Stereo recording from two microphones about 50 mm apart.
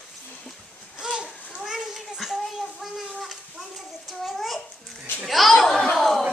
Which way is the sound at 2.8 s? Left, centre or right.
Centre.